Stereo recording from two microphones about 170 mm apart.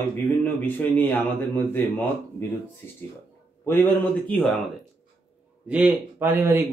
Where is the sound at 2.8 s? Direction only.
15° left (ahead or behind).